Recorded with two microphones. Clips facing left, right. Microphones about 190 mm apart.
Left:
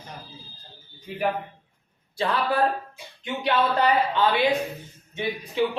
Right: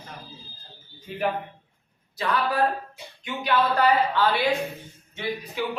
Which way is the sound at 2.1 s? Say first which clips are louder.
Left 1 dB; 30° left (ahead or behind).